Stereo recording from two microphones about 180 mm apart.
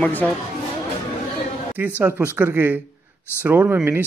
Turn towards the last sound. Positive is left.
turn(degrees=-10)  # may be behind; listen again after turning